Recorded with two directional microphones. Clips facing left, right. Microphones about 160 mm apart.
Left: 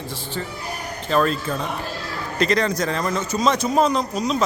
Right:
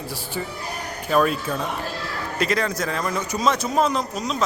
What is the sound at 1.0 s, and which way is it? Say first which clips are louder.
A man's voice: even; 5° right (ahead or behind).